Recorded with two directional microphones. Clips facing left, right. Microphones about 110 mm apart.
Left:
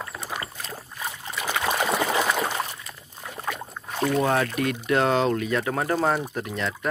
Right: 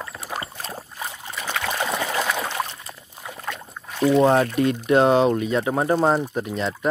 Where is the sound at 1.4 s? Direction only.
10° left (ahead or behind).